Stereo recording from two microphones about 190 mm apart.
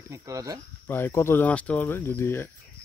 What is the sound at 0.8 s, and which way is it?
Speech, 10° left (ahead or behind).